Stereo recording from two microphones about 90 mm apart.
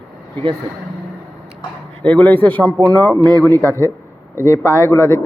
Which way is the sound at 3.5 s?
35° right (ahead or behind).